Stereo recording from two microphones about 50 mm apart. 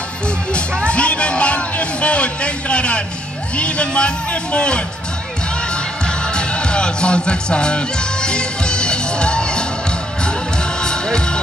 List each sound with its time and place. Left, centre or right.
0.8 s music: left
3.5 s a man's voice: left
6.0 s music: centre
10.8 s music: centre